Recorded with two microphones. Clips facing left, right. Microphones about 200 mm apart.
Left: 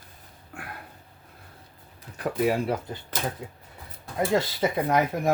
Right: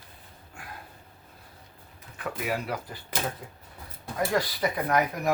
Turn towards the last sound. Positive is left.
turn(degrees=25)  # may be behind; listen again after turning